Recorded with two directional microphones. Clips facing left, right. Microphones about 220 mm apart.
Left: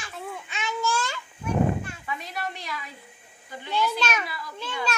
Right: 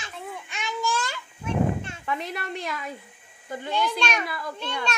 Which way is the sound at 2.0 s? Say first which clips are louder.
Right 3 dB; 55° right (ahead or behind).